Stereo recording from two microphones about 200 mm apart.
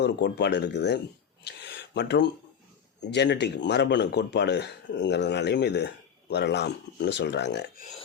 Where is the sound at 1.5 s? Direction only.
60° left (ahead or behind).